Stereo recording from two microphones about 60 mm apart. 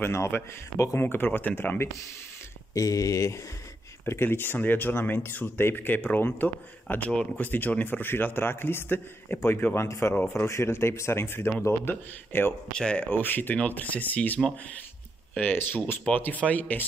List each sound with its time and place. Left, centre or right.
0.0 s speech: left
0.9 s a man's voice: left
2.7 s speech: left
4.1 s a man's voice: left
9.8 s a man's voice: left
12.7 s speech: centre
13.1 s a man's voice: left